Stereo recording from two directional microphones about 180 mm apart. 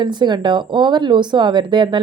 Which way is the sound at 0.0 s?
25° right (ahead or behind).